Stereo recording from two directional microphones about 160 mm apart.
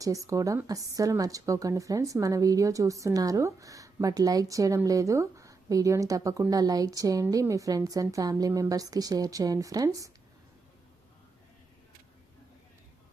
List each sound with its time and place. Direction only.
0.0 s a woman's voice: 20° right (ahead or behind)